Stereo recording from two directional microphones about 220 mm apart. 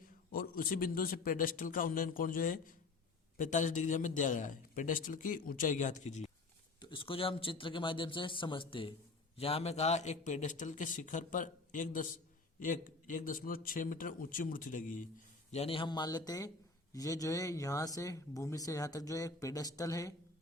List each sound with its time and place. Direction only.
0.3 s a man's voice: 40° left (ahead or behind)
6.7 s a man's voice: 20° left (ahead or behind)
15.5 s speech: 25° left (ahead or behind)